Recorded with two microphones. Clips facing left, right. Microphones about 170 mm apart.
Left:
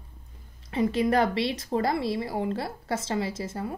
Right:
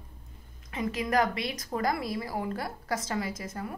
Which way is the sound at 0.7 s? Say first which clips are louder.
Left 5 dB; 30° left (ahead or behind).